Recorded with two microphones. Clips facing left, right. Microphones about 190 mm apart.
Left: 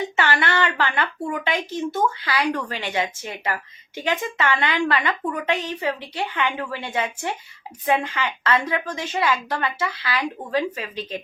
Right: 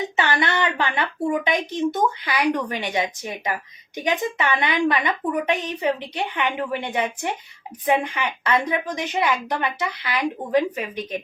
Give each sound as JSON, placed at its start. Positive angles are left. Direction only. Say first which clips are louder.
{"t": 0.2, "sound": "speech", "louder": "even", "side_deg": -20}